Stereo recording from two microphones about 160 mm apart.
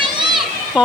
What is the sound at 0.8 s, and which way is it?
Speech, 5° right (ahead or behind).